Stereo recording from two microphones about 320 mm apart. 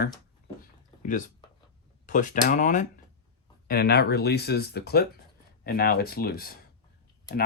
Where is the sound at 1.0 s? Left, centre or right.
Left.